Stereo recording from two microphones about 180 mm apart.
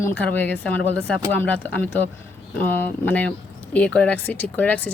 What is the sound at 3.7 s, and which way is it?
Speech, 5° left (ahead or behind).